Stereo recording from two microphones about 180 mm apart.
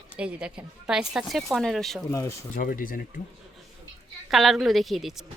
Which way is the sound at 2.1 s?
15° left (ahead or behind).